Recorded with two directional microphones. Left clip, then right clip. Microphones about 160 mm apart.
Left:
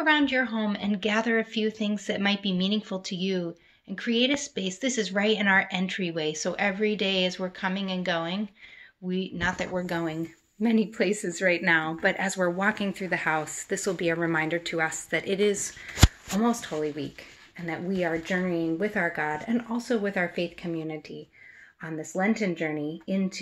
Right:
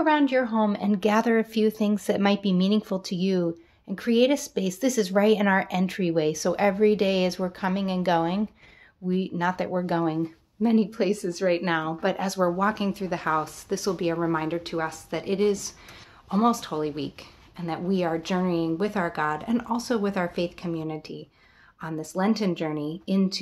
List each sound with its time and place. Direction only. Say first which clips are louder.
0.0 s speech: right 1 dB; 50° right (ahead or behind); by 15.6 s 10° right (ahead or behind)
16.3 s speech: right 3 dB; 25° right (ahead or behind)